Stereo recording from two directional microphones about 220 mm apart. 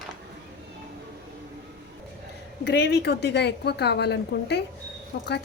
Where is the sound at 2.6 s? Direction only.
50° left (ahead or behind).